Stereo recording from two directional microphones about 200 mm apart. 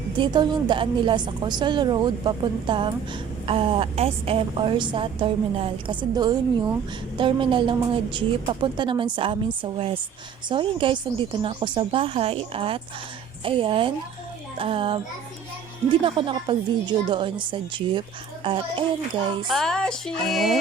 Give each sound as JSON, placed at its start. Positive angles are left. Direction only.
{"t": 0.2, "sound": "a woman's voice", "side_deg": -20}
{"t": 16.0, "sound": "a woman's voice", "side_deg": -25}
{"t": 19.5, "sound": "speech", "side_deg": 0}